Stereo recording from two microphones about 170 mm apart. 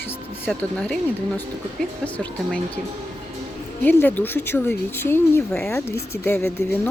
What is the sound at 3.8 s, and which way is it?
Speech, 10° left (ahead or behind).